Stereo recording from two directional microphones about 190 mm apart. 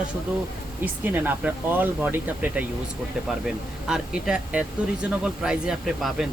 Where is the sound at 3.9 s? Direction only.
5° right (ahead or behind).